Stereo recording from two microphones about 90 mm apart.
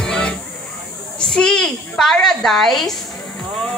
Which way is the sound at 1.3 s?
10° left (ahead or behind).